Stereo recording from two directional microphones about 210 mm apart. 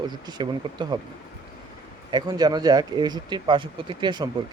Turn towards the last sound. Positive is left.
turn(degrees=-20)  # may be behind; listen again after turning